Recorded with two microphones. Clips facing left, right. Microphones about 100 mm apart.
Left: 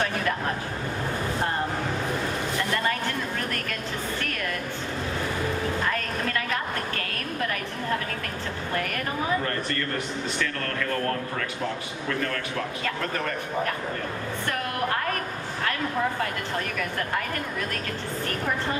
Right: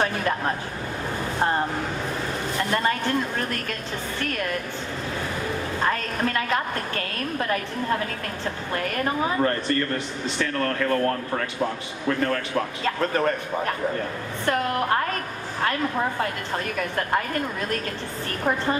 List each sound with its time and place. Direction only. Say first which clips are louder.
5.8 s a sound: right 3 dB; 30° right (ahead or behind)
9.0 s speech: right 7 dB; 30° right (ahead or behind)
12.8 s speech: right 8 dB; 35° right (ahead or behind)